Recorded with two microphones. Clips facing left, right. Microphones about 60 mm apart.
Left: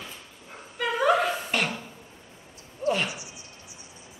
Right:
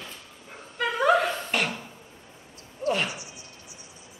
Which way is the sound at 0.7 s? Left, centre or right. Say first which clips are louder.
Right 1 dB; centre.